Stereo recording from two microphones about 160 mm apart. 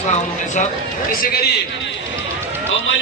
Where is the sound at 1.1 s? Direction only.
70° left (ahead or behind).